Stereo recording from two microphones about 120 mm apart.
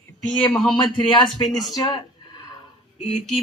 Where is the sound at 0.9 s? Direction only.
40° left (ahead or behind).